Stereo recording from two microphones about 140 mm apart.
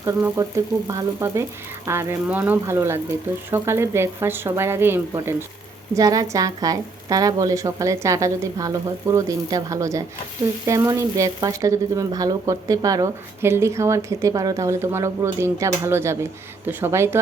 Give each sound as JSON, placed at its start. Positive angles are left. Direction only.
{"t": 0.0, "sound": "a woman's voice", "side_deg": -20}